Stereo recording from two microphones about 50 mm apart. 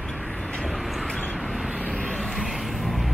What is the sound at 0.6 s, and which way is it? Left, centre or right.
Vehicle, centre.